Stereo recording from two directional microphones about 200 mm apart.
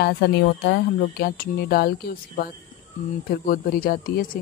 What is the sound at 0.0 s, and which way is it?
Speech, 55° left (ahead or behind).